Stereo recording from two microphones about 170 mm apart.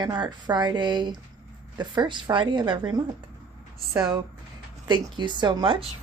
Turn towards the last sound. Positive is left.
turn(degrees=-25)  # may be behind; listen again after turning